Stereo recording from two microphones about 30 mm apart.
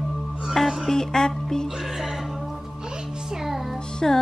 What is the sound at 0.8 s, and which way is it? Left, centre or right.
Speech, centre.